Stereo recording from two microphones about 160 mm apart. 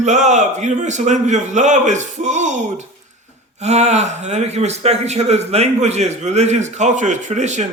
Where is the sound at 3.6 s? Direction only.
45° right (ahead or behind).